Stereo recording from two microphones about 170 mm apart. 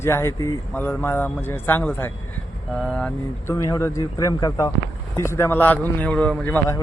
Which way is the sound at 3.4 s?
20° left (ahead or behind).